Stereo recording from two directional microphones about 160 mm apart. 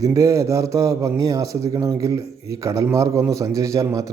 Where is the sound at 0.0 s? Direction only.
20° right (ahead or behind).